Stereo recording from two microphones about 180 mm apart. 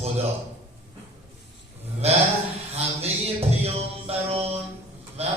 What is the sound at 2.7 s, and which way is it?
Music, 35° right (ahead or behind).